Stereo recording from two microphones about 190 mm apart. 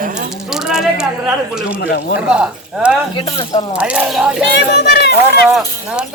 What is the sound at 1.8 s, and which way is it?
Speech, 55° left (ahead or behind).